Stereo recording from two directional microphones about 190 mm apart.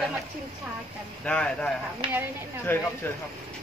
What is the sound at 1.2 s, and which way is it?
Speech, 5° left (ahead or behind).